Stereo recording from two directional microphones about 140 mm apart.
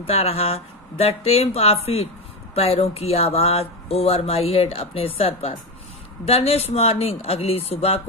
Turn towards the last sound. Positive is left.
turn(degrees=45)  # may be behind; listen again after turning